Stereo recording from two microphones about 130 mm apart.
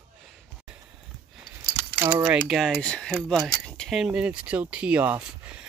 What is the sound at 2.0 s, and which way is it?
Speech, 15° right (ahead or behind).